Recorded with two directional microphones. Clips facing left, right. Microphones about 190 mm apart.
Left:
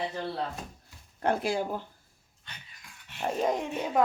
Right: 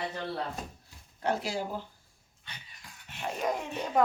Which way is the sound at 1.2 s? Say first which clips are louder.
Left 3 dB; 55° left (ahead or behind).